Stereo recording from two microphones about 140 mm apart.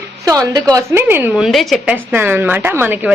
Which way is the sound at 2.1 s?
15° right (ahead or behind).